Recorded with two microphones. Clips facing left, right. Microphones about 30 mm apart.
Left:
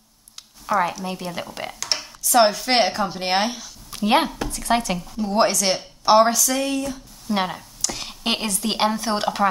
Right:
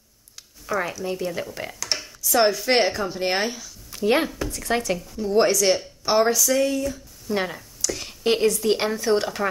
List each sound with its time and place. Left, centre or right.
0.7 s speech: centre
1.8 s a sound: left
2.3 s speech: left